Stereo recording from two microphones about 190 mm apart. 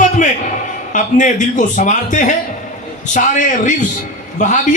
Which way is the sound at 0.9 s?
40° left (ahead or behind).